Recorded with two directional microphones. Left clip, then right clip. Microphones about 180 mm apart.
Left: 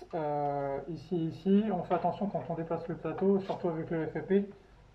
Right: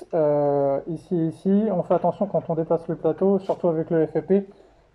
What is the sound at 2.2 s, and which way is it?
Speech, 30° right (ahead or behind).